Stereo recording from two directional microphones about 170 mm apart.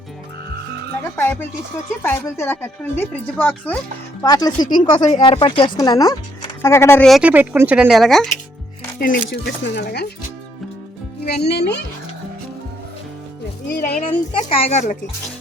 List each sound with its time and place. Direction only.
1.1 s speech: 15° left (ahead or behind)
4.2 s speech: 20° left (ahead or behind)
7.0 s speech: 5° right (ahead or behind)
9.0 s speech: 60° left (ahead or behind)
11.3 s speech: 70° left (ahead or behind)
13.7 s speech: 65° left (ahead or behind)
14.6 s speech: 45° left (ahead or behind)